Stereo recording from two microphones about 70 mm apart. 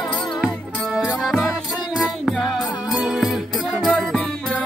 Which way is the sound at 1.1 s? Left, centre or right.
Centre.